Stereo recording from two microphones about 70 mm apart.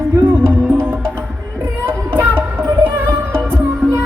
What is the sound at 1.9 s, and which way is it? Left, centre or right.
Child singing, right.